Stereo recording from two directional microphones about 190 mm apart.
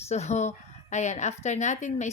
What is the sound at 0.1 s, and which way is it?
A woman's voice, 35° left (ahead or behind).